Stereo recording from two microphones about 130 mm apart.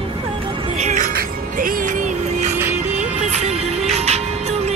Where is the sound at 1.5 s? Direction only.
90° right.